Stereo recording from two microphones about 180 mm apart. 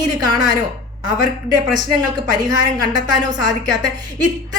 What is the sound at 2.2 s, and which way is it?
A woman's voice, 20° right (ahead or behind).